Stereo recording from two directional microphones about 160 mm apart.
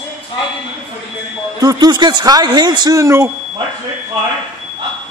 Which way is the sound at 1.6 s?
25° right (ahead or behind).